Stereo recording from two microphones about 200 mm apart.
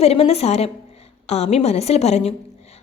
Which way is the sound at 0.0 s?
30° left (ahead or behind).